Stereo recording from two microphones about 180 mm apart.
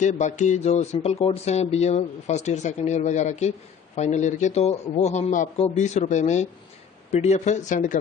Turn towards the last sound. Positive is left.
turn(degrees=45)  # may be behind; listen again after turning